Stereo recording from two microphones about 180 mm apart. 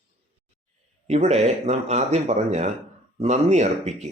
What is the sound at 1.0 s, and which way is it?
A man's voice, 35° right (ahead or behind).